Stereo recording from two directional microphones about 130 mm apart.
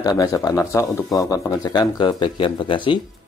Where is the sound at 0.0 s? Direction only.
25° left (ahead or behind).